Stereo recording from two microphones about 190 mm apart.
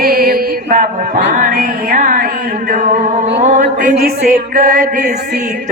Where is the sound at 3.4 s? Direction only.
40° right (ahead or behind).